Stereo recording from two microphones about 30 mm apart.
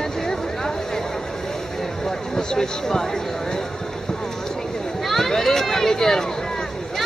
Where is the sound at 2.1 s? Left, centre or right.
Left.